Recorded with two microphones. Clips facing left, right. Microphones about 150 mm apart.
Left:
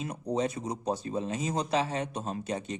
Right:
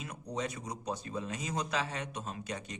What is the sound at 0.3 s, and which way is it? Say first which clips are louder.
A man's voice: left 6 dB; 30° left (ahead or behind).